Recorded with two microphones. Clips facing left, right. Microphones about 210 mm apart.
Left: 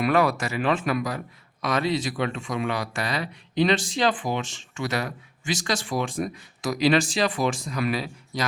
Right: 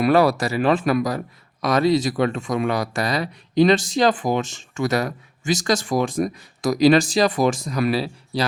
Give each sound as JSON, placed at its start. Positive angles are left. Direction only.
{"t": 0.0, "sound": "speech", "side_deg": -35}